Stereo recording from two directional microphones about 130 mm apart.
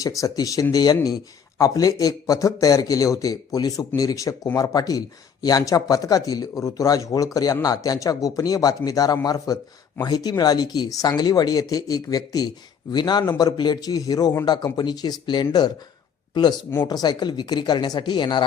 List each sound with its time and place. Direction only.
0.2 s speech: 25° left (ahead or behind)